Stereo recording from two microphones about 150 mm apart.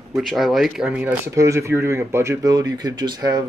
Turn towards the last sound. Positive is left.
turn(degrees=-25)  # may be behind; listen again after turning